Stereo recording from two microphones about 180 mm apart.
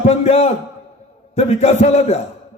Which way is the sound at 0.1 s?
35° left (ahead or behind).